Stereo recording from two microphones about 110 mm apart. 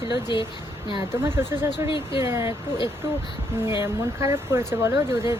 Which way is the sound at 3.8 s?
25° right (ahead or behind).